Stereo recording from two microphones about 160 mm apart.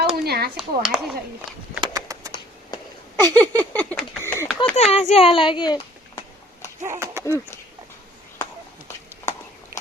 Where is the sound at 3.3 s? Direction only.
10° left (ahead or behind).